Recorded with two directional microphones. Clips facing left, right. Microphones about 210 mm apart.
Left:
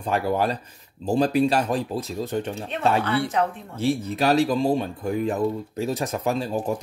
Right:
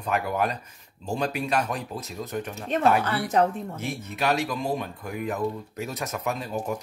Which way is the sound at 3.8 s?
30° left (ahead or behind).